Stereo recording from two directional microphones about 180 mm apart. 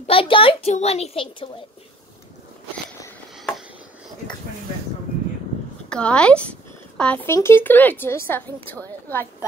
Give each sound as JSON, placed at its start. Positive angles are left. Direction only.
{"t": 0.0, "sound": "a child's voice", "side_deg": 30}
{"t": 5.9, "sound": "a woman's voice", "side_deg": 5}